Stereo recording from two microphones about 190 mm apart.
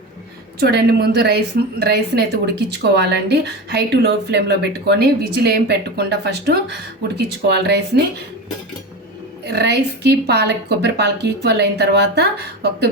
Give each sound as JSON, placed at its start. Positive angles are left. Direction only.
{"t": 0.6, "sound": "speech", "side_deg": -55}
{"t": 9.4, "sound": "speech", "side_deg": -60}